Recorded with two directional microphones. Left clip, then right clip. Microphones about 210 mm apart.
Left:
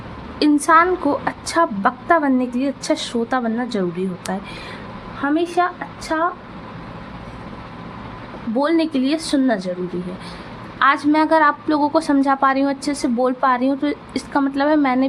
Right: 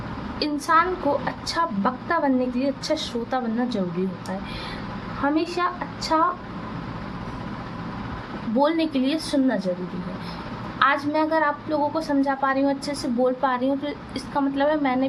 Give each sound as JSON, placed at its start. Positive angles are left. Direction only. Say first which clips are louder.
{"t": 0.3, "sound": "a woman's voice", "louder": "left 7 dB", "side_deg": 25}
{"t": 5.2, "sound": "speech", "louder": "left 5 dB", "side_deg": 10}
{"t": 8.5, "sound": "a woman's voice", "louder": "left 3 dB", "side_deg": 20}
{"t": 10.8, "sound": "a woman's voice", "louder": "left 5 dB", "side_deg": 30}